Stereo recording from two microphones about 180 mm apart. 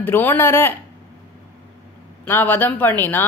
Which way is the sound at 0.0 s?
10° left (ahead or behind).